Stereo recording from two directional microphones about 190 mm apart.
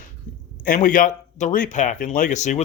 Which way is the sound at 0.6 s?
45° left (ahead or behind).